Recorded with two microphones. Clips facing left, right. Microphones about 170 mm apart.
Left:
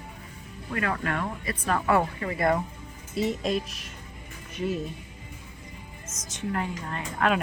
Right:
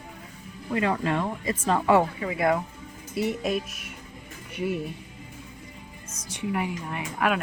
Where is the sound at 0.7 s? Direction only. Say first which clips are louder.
Right 4 dB; 20° right (ahead or behind); by 2.6 s 5° right (ahead or behind).